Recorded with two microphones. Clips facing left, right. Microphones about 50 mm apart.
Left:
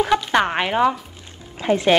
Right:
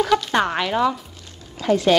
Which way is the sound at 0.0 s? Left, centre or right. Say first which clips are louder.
Left 1 dB; left.